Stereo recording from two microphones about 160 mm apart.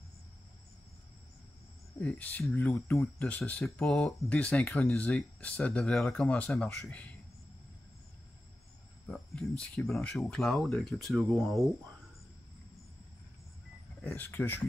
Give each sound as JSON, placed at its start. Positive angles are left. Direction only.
{"t": 2.0, "sound": "speech", "side_deg": 10}
{"t": 9.0, "sound": "speech", "side_deg": 5}
{"t": 14.0, "sound": "speech", "side_deg": 10}